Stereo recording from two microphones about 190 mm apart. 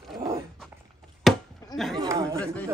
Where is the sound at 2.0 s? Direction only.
15° right (ahead or behind).